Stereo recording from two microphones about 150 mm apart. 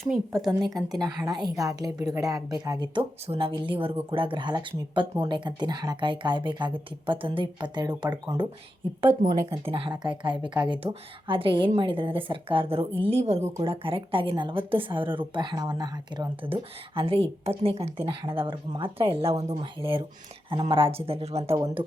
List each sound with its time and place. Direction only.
0.0 s a woman's voice: centre (ahead or behind)
0.8 s a woman's voice: 25° right (ahead or behind)
9.5 s speech: 40° right (ahead or behind)